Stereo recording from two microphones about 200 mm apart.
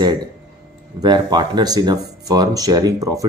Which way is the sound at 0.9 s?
20° right (ahead or behind).